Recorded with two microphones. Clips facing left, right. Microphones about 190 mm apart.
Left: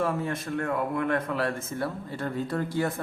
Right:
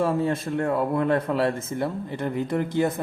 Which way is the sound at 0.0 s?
30° right (ahead or behind).